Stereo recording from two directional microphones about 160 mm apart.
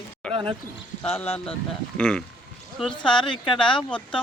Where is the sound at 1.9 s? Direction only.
5° left (ahead or behind).